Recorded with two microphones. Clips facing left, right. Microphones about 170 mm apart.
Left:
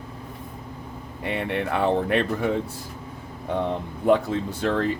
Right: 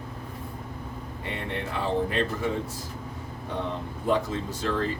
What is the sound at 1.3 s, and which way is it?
Speech, 65° left (ahead or behind).